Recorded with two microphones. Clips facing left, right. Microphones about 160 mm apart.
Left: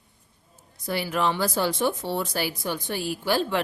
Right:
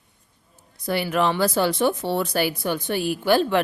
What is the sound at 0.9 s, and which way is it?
Speech, 65° right (ahead or behind).